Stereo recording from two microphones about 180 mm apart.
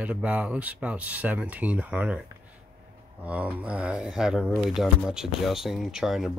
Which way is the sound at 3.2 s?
10° right (ahead or behind).